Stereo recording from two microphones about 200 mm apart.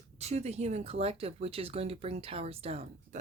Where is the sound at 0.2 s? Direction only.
35° right (ahead or behind).